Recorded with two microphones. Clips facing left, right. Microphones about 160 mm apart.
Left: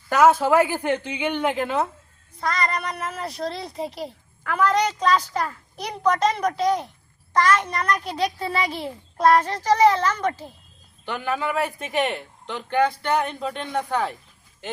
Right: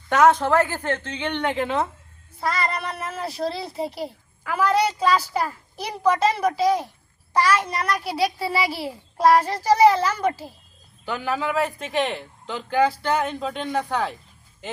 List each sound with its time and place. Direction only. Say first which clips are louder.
0.1 s a woman's voice: left 1 dB; 5° left (ahead or behind)